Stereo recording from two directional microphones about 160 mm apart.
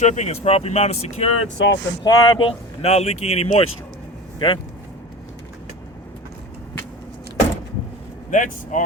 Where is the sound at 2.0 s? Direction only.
25° left (ahead or behind).